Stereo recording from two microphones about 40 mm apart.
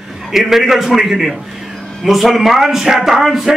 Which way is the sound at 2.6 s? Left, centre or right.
Centre.